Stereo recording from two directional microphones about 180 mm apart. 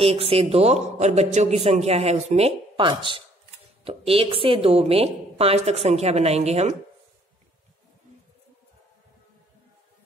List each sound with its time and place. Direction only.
0.0 s a man's voice: 30° right (ahead or behind)